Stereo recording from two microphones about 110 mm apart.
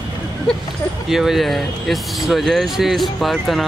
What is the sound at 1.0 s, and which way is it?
Speech, 5° right (ahead or behind).